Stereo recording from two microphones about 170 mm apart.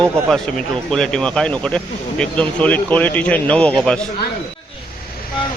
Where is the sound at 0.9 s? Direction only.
5° left (ahead or behind).